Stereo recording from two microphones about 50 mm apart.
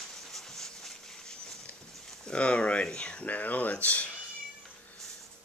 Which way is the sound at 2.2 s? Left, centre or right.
Left.